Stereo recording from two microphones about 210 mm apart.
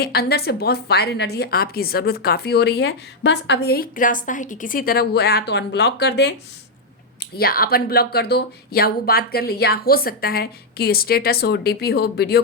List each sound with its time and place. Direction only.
0.0 s a woman's voice: 50° left (ahead or behind)
7.3 s a woman's voice: 45° left (ahead or behind)